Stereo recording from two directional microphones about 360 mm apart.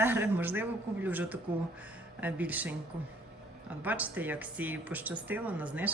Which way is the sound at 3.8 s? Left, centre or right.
Centre.